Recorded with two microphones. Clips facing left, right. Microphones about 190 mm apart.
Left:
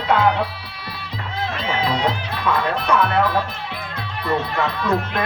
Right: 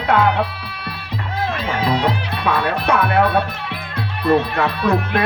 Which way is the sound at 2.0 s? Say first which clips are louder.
Right 2 dB; 65° right (ahead or behind).